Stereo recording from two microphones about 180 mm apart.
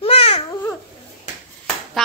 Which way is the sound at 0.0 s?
35° left (ahead or behind).